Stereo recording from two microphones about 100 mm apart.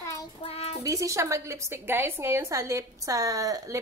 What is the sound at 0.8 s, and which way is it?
A woman's voice, 35° right (ahead or behind).